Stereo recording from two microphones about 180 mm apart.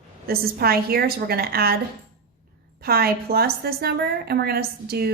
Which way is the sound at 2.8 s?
60° right (ahead or behind).